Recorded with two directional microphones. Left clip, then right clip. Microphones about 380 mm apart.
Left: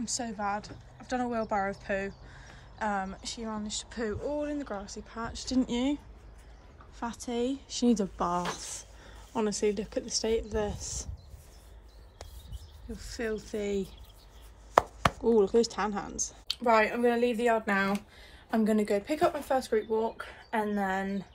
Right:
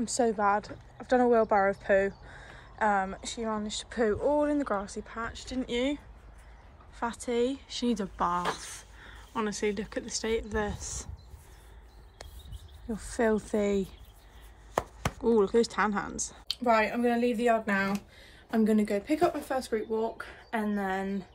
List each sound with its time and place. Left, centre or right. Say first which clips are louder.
0.0 s speech: right 7 dB; centre
12.9 s speech: right 7 dB; centre